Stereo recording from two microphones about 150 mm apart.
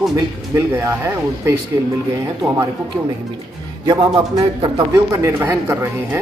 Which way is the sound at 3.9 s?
25° right (ahead or behind).